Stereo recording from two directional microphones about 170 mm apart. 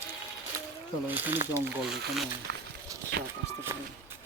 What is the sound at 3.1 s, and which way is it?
Speech, 75° right (ahead or behind).